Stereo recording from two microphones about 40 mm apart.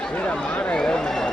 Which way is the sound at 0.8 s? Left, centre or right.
Centre.